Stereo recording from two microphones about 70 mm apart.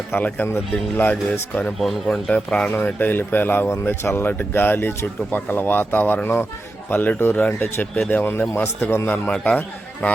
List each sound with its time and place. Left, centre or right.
0.1 s speech: left
0.7 s speech: left
1.8 s speech: centre
2.3 s speech: centre